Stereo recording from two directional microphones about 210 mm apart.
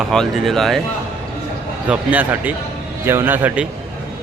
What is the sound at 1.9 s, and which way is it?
A man's voice, 10° right (ahead or behind).